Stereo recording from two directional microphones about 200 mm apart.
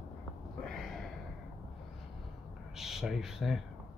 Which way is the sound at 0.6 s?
Centre (ahead or behind).